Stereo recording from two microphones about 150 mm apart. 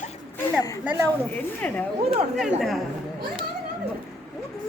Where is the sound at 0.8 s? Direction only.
15° right (ahead or behind).